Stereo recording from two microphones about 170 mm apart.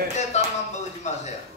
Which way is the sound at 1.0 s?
45° left (ahead or behind).